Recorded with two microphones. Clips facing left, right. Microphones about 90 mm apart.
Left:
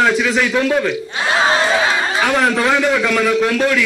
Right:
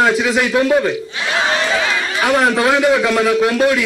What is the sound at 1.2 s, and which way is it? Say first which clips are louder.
Chatter: left 3 dB; 30° left (ahead or behind).